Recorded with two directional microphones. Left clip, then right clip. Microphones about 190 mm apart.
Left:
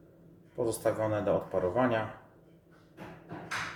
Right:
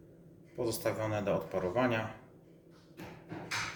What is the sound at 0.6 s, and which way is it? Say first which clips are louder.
Speech: left 4 dB; 25° left (ahead or behind).